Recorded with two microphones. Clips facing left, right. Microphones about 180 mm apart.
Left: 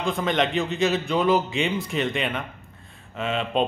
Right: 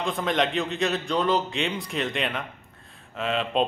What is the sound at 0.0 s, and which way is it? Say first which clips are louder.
A man's voice: left 2 dB; centre (ahead or behind).